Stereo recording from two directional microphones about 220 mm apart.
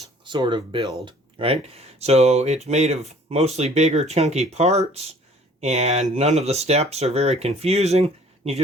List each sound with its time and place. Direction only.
0.3 s speech: 20° right (ahead or behind)